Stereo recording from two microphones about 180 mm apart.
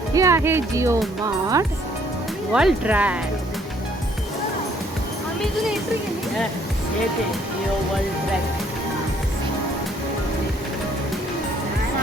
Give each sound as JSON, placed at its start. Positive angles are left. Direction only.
{"t": 0.1, "sound": "speech", "side_deg": -15}
{"t": 2.5, "sound": "speech", "side_deg": -5}